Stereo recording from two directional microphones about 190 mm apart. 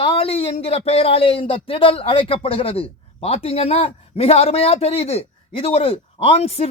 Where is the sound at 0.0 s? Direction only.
30° left (ahead or behind).